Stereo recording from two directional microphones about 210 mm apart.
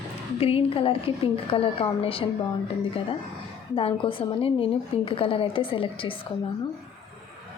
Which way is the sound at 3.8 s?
25° left (ahead or behind).